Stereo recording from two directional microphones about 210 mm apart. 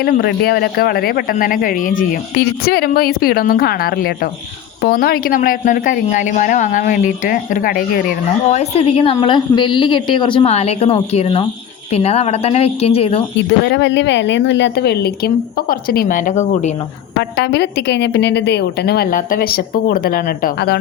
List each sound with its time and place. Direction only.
0.0 s a woman's voice: 50° left (ahead or behind)
8.4 s a woman's voice: 30° left (ahead or behind)
13.7 s speech: 60° left (ahead or behind); by 16.7 s 35° left (ahead or behind)
17.2 s speech: 55° left (ahead or behind)